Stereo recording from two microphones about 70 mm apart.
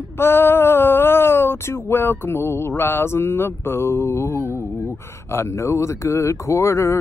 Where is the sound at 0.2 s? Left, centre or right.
Left.